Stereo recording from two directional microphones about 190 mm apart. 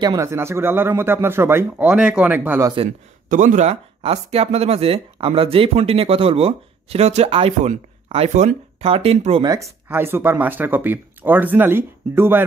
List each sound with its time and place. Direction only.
0.0 s speech: 15° right (ahead or behind)
3.3 s speech: 40° right (ahead or behind)
9.5 s speech: 15° right (ahead or behind)